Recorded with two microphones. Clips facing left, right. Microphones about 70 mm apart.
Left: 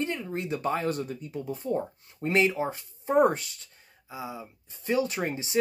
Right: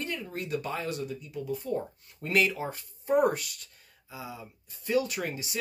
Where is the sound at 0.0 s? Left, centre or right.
Left.